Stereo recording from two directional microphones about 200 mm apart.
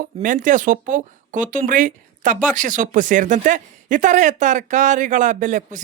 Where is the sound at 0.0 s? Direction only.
40° right (ahead or behind).